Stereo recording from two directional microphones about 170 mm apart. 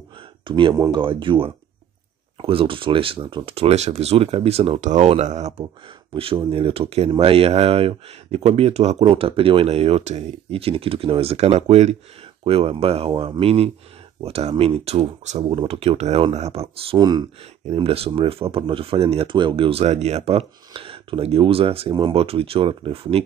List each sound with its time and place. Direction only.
0.5 s speech: 30° right (ahead or behind)